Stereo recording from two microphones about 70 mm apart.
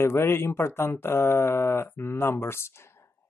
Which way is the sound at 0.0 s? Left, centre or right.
Left.